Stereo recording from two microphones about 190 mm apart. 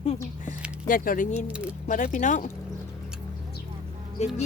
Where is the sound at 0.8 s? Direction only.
45° left (ahead or behind).